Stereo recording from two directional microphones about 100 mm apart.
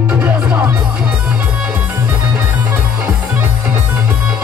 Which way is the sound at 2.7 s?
25° right (ahead or behind).